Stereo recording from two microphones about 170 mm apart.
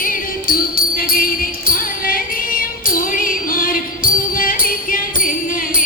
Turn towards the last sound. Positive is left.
turn(degrees=55)  # may be behind; listen again after turning